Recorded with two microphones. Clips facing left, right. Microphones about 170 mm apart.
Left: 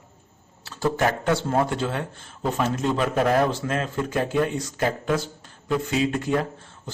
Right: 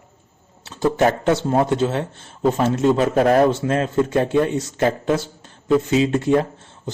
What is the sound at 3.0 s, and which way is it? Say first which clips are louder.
Speech: right 4 dB; 40° right (ahead or behind).